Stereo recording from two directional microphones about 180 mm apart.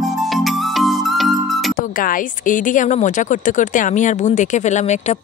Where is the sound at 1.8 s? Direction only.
50° left (ahead or behind).